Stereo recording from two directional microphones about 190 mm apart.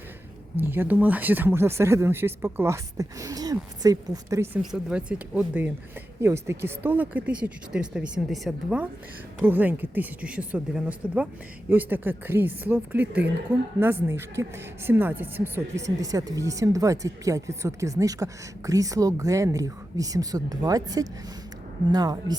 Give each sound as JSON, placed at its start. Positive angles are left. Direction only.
{"t": 0.6, "sound": "speech", "side_deg": -10}
{"t": 4.6, "sound": "speech", "side_deg": -5}